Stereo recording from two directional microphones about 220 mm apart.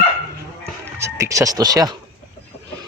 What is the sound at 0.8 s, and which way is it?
Speech, 15° right (ahead or behind).